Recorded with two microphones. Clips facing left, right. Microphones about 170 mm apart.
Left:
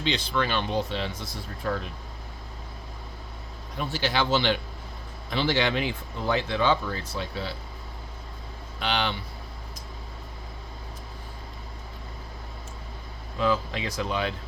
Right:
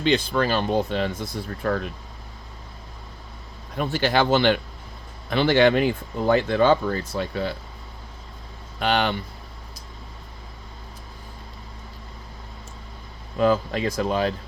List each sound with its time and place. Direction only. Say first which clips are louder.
0.0 s speech: right 6 dB; 50° right (ahead or behind)
3.8 s speech: right 6 dB; 55° right (ahead or behind)
8.8 s speech: right 6 dB; 50° right (ahead or behind)
13.4 s speech: right 6 dB; 45° right (ahead or behind)